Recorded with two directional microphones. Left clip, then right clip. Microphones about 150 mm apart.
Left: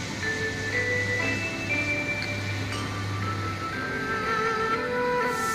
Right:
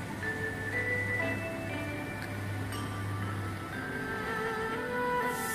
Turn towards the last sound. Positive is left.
turn(degrees=-40)  # may be behind; listen again after turning